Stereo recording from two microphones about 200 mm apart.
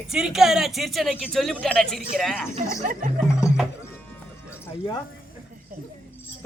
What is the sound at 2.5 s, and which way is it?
Speech, 40° right (ahead or behind).